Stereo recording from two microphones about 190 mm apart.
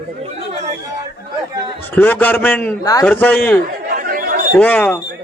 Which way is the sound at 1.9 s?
10° left (ahead or behind).